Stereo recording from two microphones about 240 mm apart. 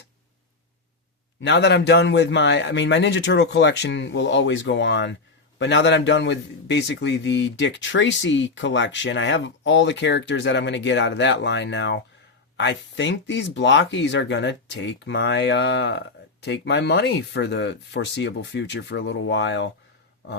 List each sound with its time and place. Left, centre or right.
1.4 s speech: left